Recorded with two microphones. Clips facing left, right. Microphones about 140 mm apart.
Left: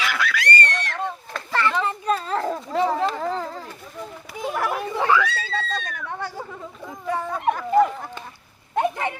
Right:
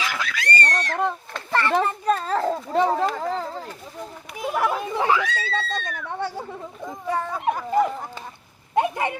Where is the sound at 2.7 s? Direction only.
45° right (ahead or behind).